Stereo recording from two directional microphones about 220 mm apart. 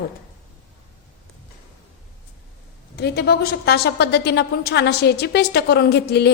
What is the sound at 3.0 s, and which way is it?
A woman's voice, 45° left (ahead or behind).